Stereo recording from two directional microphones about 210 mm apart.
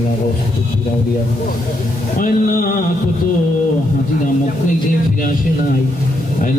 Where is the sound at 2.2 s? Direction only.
40° left (ahead or behind).